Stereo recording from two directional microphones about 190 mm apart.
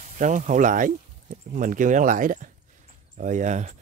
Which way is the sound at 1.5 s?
45° right (ahead or behind).